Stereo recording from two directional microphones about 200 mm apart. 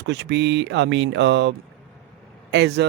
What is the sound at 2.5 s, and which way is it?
Speech, 60° right (ahead or behind).